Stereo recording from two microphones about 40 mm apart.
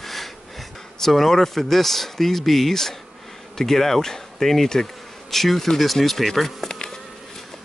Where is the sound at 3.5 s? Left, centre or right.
Centre.